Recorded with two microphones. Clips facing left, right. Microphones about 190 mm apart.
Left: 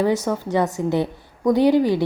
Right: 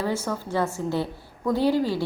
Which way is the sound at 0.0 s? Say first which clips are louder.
Left 7 dB; 15° left (ahead or behind).